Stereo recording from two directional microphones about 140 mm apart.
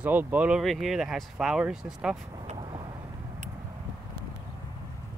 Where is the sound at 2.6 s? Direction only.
35° right (ahead or behind).